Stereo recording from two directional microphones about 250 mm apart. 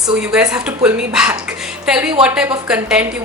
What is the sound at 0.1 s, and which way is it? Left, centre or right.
A woman's voice, centre.